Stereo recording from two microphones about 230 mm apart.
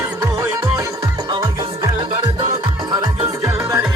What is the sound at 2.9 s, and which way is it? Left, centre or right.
Music, centre.